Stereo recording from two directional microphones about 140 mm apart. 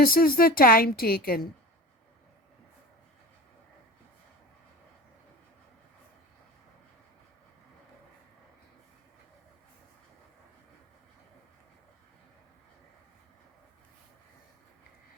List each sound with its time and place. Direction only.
0.0 s a woman's voice: 90° left